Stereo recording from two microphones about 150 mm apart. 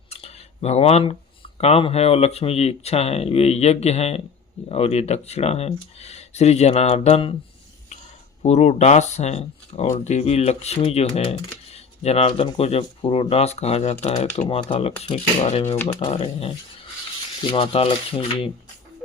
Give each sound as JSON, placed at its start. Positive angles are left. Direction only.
{"t": 0.1, "sound": "a sound", "side_deg": 45}
{"t": 1.5, "sound": "speech", "side_deg": 45}
{"t": 8.4, "sound": "speech", "side_deg": 50}
{"t": 14.4, "sound": "rub", "side_deg": 35}